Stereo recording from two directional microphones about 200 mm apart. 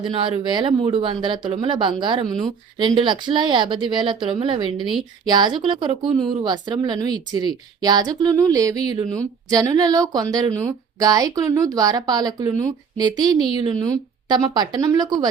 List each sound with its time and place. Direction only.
0.0 s speech: 25° right (ahead or behind)